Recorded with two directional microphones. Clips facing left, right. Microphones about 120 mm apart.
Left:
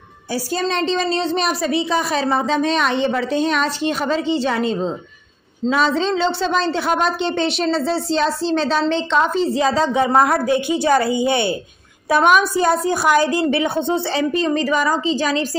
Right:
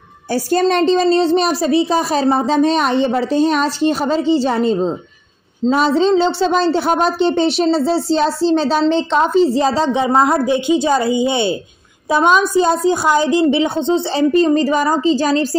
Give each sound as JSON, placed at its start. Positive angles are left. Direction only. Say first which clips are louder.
{"t": 0.3, "sound": "a woman's voice", "louder": "right 7 dB", "side_deg": -50}
{"t": 14.3, "sound": "a woman's voice", "louder": "right 7 dB", "side_deg": -35}